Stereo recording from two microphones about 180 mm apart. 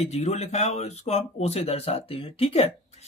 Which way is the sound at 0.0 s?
35° left (ahead or behind).